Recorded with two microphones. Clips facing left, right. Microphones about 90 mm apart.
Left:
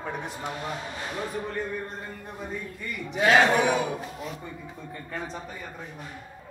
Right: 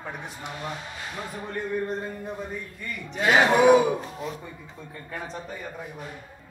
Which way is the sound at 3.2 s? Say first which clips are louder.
Right 3 dB; 5° right (ahead or behind).